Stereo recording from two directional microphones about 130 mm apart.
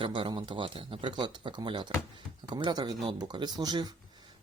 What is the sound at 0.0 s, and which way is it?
Speech, 40° right (ahead or behind).